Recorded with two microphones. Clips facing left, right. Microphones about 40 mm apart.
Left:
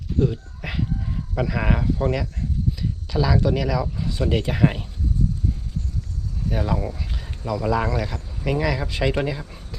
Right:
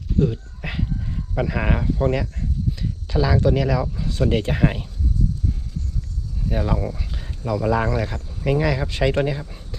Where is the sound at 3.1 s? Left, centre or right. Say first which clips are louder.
Right 2 dB; centre.